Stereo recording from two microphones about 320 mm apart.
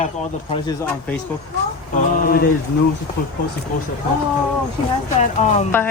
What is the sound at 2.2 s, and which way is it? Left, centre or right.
Speech, left.